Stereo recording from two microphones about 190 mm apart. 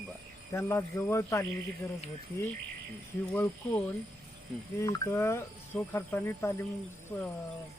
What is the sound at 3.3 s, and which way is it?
Speech, 10° left (ahead or behind).